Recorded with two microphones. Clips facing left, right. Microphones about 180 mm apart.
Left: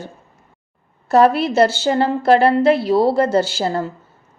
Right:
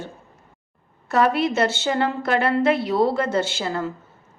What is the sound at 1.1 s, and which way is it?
A woman's voice, 35° left (ahead or behind).